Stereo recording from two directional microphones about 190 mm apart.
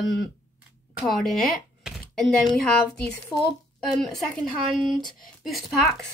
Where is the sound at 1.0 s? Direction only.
Centre (ahead or behind).